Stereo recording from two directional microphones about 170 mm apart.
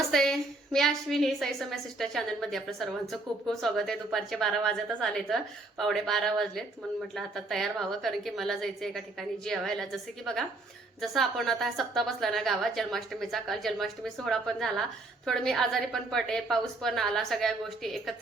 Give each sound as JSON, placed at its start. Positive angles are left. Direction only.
{"t": 0.1, "sound": "a woman's voice", "side_deg": 5}